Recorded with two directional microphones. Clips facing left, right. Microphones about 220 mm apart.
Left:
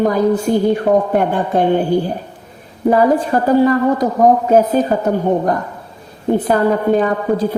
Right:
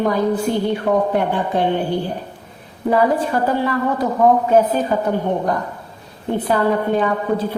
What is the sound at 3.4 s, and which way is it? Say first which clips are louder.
A woman's voice: left 7 dB; 40° left (ahead or behind).